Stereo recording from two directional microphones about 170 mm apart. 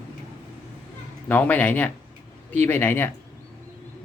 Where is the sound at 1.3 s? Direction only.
10° left (ahead or behind).